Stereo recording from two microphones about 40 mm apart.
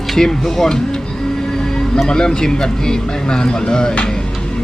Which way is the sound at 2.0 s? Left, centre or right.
Left.